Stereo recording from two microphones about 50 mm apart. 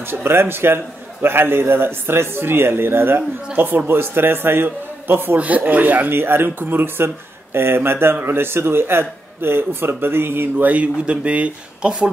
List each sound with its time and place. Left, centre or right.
0.0 s a man's voice: right
5.4 s speech: right
6.1 s a man's voice: right
10.7 s speech: right